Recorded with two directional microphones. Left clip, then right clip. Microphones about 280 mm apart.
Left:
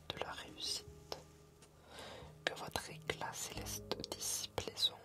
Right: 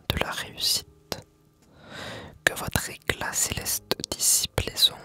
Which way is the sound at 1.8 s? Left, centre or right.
Right.